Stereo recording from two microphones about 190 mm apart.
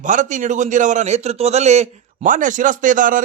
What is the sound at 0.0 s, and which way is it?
A man's voice, 40° right (ahead or behind).